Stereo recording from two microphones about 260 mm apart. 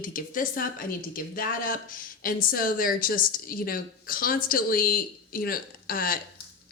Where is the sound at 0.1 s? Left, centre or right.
Left.